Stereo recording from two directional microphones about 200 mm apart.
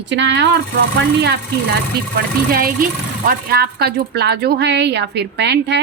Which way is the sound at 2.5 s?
45° right (ahead or behind).